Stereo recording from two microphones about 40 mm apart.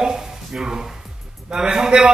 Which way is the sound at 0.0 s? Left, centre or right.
Centre.